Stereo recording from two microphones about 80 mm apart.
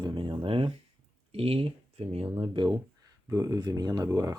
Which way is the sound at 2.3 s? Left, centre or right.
Right.